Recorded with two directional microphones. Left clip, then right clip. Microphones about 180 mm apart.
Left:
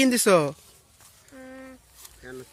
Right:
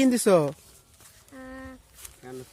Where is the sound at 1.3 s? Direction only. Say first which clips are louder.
Right 1 dB; 30° right (ahead or behind).